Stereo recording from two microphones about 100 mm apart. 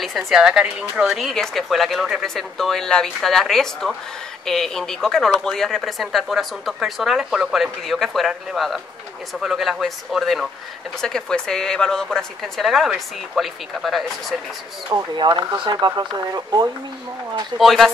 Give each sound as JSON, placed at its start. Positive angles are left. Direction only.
{"t": 0.0, "sound": "speech", "side_deg": -5}
{"t": 15.1, "sound": "speech", "side_deg": -50}
{"t": 17.6, "sound": "speech", "side_deg": 0}